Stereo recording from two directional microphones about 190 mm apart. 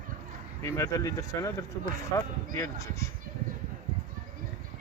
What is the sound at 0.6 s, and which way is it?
Speech, 15° left (ahead or behind).